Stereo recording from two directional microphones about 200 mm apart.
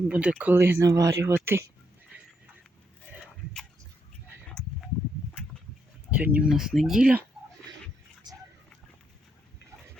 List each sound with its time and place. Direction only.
0.1 s speech: 5° right (ahead or behind)
6.1 s speech: 5° right (ahead or behind)
8.2 s a sound: 20° right (ahead or behind)